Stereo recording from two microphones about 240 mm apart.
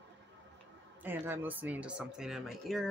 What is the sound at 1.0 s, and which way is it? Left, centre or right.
Speech, centre.